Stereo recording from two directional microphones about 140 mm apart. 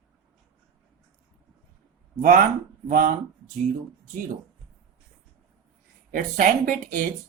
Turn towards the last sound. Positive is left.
turn(degrees=-70)  # may be behind; listen again after turning